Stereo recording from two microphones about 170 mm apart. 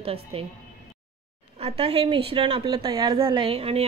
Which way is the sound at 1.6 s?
35° right (ahead or behind).